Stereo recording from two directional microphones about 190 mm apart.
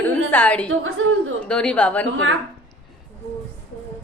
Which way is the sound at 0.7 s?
90° right.